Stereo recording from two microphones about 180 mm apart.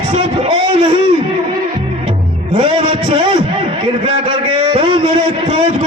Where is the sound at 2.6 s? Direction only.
30° right (ahead or behind).